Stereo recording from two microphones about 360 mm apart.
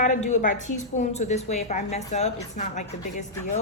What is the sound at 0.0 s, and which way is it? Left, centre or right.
A woman's voice, centre.